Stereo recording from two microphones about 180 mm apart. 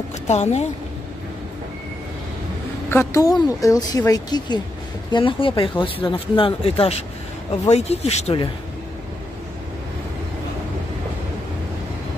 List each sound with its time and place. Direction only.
0.3 s speech: 35° left (ahead or behind)
2.9 s a woman's voice: 15° left (ahead or behind); by 8.5 s 35° left (ahead or behind)